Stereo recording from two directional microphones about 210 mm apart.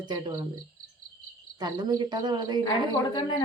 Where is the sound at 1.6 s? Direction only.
20° right (ahead or behind).